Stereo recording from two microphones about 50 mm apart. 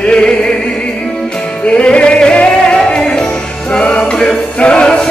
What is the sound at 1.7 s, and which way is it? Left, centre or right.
Music, left.